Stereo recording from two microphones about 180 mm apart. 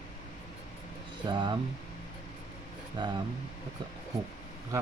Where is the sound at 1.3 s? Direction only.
25° right (ahead or behind).